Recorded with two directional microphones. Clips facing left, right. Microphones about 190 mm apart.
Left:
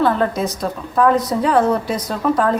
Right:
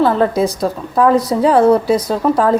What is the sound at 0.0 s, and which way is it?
A woman's voice, 30° right (ahead or behind).